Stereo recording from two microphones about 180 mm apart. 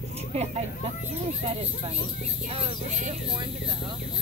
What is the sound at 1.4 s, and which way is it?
Speech, 35° right (ahead or behind).